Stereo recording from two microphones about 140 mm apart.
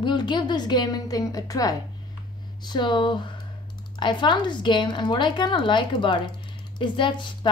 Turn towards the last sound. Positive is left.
turn(degrees=35)  # may be behind; listen again after turning